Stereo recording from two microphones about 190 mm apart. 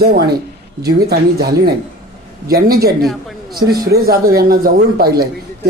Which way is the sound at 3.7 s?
55° right (ahead or behind).